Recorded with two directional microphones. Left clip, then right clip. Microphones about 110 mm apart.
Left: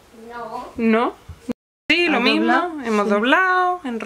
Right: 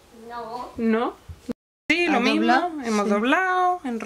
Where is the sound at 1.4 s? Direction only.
Centre (ahead or behind).